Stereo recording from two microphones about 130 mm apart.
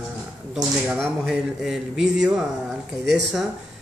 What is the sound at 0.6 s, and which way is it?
A man's voice, centre (ahead or behind).